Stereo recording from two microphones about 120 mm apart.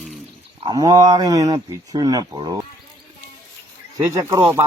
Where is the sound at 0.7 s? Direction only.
35° right (ahead or behind).